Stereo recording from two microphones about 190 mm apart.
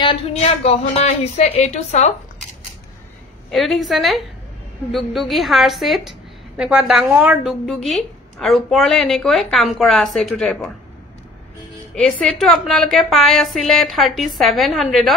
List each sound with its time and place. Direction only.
0.0 s a woman's voice: 30° left (ahead or behind)
3.4 s a woman's voice: centre (ahead or behind)
11.9 s a woman's voice: 5° left (ahead or behind)